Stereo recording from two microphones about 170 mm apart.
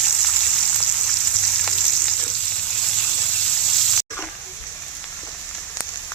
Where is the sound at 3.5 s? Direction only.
Centre (ahead or behind).